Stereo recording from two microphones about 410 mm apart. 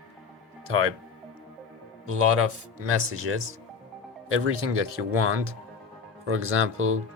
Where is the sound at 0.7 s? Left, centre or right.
Right.